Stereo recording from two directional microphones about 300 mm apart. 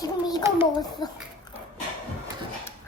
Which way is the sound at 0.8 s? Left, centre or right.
Centre.